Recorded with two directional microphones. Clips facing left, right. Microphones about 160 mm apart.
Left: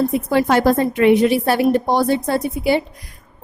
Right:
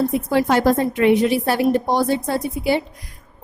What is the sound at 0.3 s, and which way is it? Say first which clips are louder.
A woman's voice: left 1 dB; 65° left (ahead or behind).